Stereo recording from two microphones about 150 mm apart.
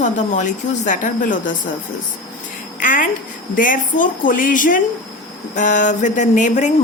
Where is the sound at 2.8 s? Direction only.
60° left (ahead or behind).